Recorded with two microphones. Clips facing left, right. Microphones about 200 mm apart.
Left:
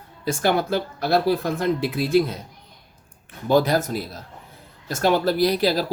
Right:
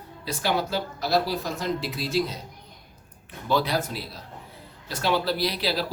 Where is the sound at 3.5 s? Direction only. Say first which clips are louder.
Left 6 dB; 45° left (ahead or behind).